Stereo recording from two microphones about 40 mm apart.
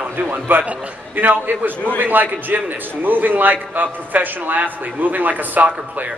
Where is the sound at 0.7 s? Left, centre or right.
Right.